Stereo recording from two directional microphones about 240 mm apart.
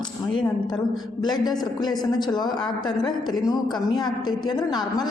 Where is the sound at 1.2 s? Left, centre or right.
Centre.